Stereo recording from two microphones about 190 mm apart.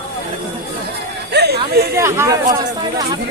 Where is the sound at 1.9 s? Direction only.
15° right (ahead or behind).